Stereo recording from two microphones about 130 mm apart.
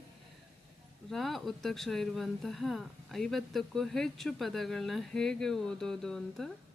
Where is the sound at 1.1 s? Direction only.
Centre (ahead or behind).